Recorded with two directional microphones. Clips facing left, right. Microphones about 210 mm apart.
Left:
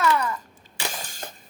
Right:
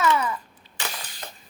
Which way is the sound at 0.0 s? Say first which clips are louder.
Even; centre (ahead or behind).